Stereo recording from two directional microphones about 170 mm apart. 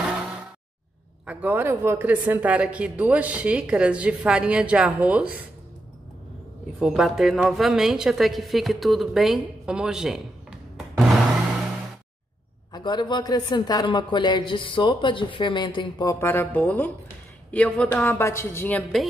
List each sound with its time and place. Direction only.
1.2 s speech: 10° right (ahead or behind)
6.8 s a woman's voice: centre (ahead or behind)
12.7 s speech: 25° left (ahead or behind); by 19.0 s 5° left (ahead or behind)